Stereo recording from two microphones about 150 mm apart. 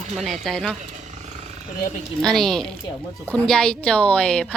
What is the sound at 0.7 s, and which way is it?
Wild animals, 55° right (ahead or behind).